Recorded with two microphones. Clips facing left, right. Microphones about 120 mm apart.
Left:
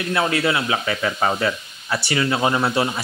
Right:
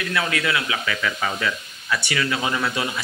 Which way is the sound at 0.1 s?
30° left (ahead or behind).